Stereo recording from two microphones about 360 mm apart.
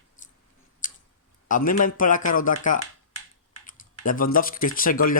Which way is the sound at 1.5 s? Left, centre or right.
Left.